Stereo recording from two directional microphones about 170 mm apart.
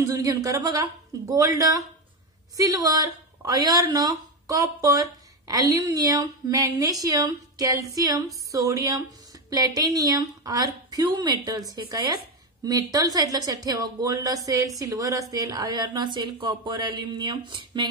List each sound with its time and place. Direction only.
0.0 s speech: 20° right (ahead or behind)